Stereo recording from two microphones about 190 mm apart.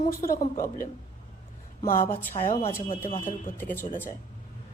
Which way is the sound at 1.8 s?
45° left (ahead or behind).